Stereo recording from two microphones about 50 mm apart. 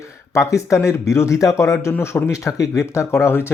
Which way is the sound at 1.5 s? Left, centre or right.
Left.